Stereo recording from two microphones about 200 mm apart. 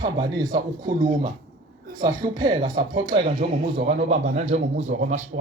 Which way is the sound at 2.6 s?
45° right (ahead or behind).